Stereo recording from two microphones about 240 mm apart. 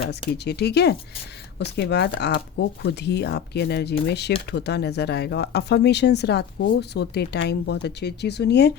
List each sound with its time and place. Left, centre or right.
0.4 s speech: left